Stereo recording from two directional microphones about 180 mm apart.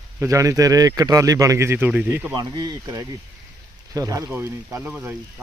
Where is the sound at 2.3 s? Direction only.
20° right (ahead or behind).